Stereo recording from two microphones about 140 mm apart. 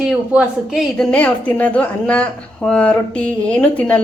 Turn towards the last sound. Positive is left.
turn(degrees=10)  # may be behind; listen again after turning